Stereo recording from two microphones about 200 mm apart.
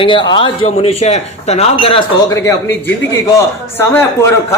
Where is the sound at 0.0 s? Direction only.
25° left (ahead or behind).